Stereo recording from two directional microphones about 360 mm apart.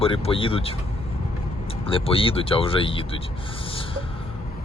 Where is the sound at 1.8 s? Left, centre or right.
Centre.